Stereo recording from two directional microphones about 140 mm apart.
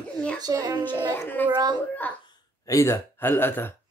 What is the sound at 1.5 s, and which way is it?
Speech, 30° right (ahead or behind).